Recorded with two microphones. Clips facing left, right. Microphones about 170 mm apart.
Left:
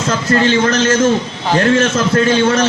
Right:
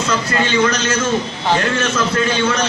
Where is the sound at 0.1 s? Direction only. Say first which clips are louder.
Left 7 dB; 45° left (ahead or behind).